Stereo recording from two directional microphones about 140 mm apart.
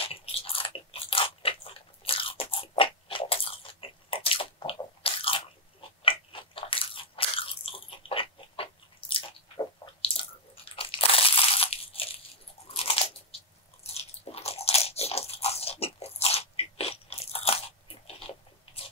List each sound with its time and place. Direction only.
0.0 s biting: 45° left (ahead or behind)
10.0 s crunch: 45° left (ahead or behind)
13.8 s biting: 45° left (ahead or behind)